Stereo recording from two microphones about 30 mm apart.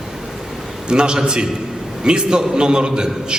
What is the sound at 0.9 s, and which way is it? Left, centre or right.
A man's voice, right.